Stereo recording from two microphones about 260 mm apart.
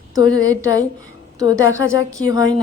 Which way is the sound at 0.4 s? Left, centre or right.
Centre.